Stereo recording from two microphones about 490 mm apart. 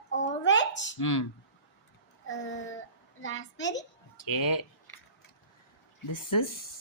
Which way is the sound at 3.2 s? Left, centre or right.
Left.